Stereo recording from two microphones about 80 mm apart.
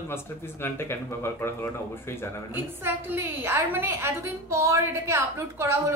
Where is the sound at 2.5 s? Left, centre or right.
Right.